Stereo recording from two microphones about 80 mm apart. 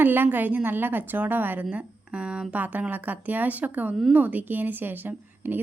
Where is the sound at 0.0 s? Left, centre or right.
Right.